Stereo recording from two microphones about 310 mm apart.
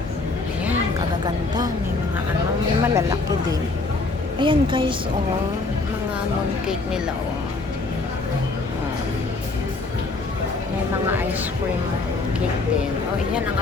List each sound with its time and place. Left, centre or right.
0.6 s a sound: centre
2.8 s a woman's voice: centre
4.4 s a woman's voice: centre